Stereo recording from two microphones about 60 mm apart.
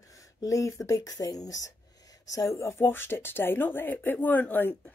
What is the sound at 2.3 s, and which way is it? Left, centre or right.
A woman's voice, left.